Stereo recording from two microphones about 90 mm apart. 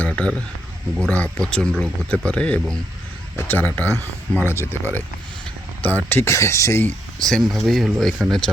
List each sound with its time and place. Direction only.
0.0 s speech: 15° left (ahead or behind)
5.8 s speech: 20° left (ahead or behind)
7.3 s speech: 5° left (ahead or behind)